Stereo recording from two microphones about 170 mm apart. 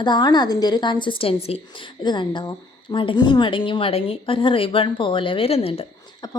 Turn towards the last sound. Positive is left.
turn(degrees=35)  # may be behind; listen again after turning